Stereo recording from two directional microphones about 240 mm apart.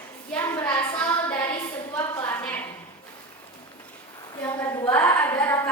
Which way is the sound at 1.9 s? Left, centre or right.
Centre.